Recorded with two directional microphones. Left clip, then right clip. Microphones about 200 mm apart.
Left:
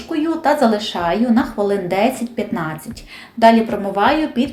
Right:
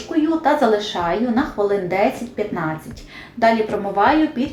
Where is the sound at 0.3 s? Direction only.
35° left (ahead or behind).